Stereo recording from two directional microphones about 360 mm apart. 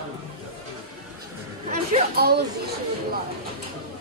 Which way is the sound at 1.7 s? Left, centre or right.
Right.